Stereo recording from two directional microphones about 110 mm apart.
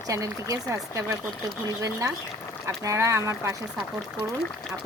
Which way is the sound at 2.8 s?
25° right (ahead or behind).